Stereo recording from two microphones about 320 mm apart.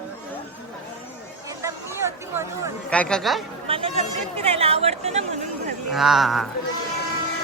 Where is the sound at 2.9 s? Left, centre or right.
Centre.